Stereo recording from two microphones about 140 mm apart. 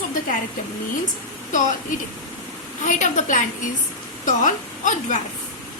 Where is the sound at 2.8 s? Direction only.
60° left (ahead or behind).